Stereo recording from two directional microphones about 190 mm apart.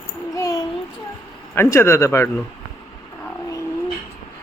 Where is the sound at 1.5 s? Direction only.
15° left (ahead or behind).